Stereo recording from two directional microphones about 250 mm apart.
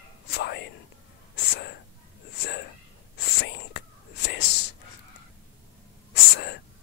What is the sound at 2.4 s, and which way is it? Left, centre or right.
Whispering, left.